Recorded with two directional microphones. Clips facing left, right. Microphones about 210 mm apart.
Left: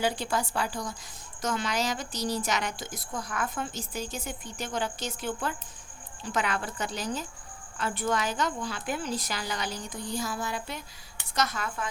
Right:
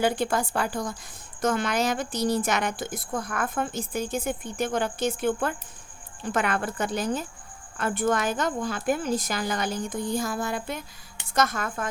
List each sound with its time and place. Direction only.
0.0 s a woman's voice: 55° right (ahead or behind)